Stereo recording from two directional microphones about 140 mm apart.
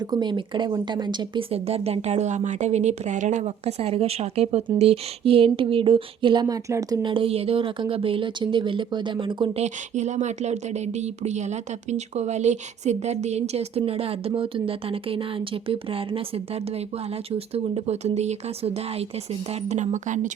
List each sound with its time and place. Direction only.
0.0 s a woman's voice: 30° right (ahead or behind)
7.0 s a woman's voice: 40° right (ahead or behind)
9.6 s speech: 55° right (ahead or behind)